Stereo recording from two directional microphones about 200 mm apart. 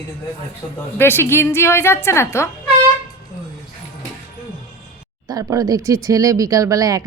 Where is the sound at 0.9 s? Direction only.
10° left (ahead or behind).